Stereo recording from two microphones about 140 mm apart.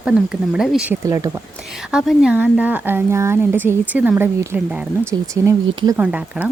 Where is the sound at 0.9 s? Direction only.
20° right (ahead or behind).